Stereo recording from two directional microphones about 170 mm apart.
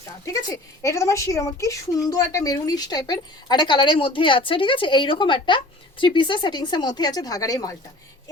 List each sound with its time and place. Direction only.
0.5 s a woman's voice: 20° left (ahead or behind)